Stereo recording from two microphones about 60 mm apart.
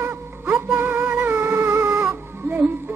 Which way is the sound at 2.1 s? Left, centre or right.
Right.